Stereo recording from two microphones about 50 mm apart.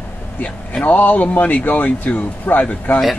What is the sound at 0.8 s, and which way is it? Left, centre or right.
Speech, left.